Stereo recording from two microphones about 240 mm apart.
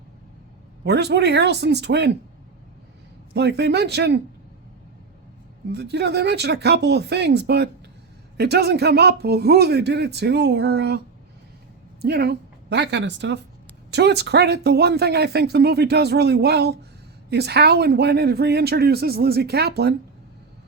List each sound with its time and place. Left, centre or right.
0.9 s speech: right
3.3 s speech: right
5.7 s speech: right
12.0 s speech: right